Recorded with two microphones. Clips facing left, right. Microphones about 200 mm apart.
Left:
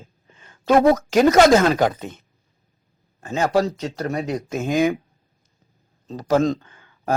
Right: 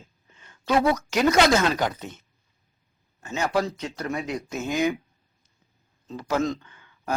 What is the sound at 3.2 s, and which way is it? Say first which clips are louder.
Speech: left 5 dB; 40° left (ahead or behind).